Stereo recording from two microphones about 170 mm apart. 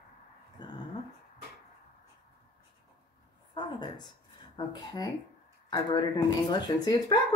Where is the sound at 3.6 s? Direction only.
25° left (ahead or behind).